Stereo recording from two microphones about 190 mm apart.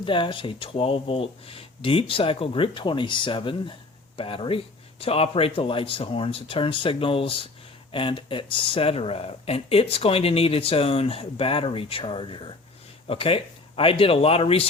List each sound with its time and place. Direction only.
0.0 s speech: 25° left (ahead or behind)